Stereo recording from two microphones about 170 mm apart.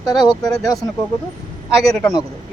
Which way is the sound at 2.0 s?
20° left (ahead or behind).